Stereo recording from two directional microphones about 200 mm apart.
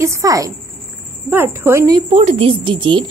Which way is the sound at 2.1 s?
30° right (ahead or behind).